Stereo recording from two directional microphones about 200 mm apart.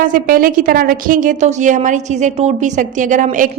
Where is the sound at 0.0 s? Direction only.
45° right (ahead or behind).